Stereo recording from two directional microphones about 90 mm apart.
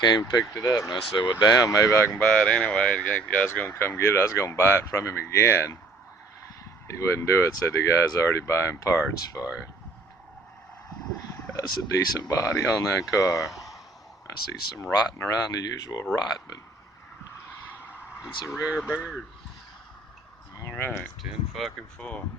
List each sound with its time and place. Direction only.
0.0 s speech: 50° left (ahead or behind); by 2.0 s 35° left (ahead or behind)
2.1 s speech: 15° left (ahead or behind)
3.4 s speech: 25° left (ahead or behind)
6.8 s speech: 30° left (ahead or behind)
9.4 s speech: 20° left (ahead or behind)
11.5 s speech: 40° left (ahead or behind)
13.5 s a sound: centre (ahead or behind)
14.3 s speech: 40° left (ahead or behind)
18.4 s speech: centre (ahead or behind)
20.6 s speech: 25° left (ahead or behind)
21.2 s speech: centre (ahead or behind)
21.9 s speech: 15° left (ahead or behind)